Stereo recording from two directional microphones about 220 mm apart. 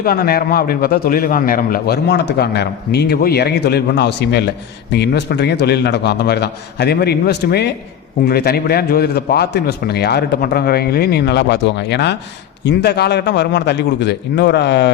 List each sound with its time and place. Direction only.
0.0 s a man's voice: 45° left (ahead or behind)